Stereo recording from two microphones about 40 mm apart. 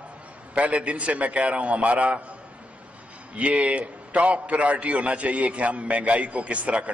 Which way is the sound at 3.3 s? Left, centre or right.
Right.